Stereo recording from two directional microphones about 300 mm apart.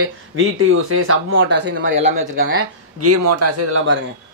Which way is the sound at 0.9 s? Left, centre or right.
Right.